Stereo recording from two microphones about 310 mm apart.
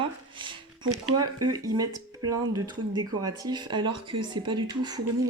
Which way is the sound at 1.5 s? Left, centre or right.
Centre.